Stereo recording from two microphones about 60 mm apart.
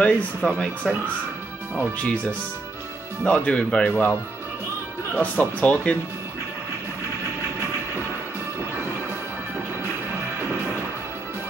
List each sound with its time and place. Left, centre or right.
0.0 s speech: left
2.0 s speech: centre
3.3 s speech: left
3.9 s speech: left